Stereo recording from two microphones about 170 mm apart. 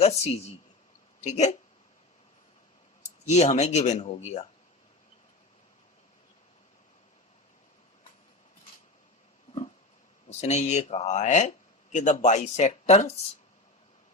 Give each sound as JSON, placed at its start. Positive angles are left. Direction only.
{"t": 0.0, "sound": "speech", "side_deg": 40}
{"t": 3.2, "sound": "speech", "side_deg": 40}
{"t": 10.2, "sound": "speech", "side_deg": 40}